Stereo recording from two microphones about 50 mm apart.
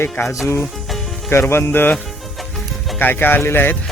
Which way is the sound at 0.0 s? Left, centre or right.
Left.